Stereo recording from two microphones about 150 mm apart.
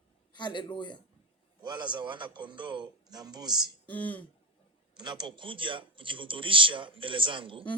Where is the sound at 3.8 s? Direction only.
10° left (ahead or behind).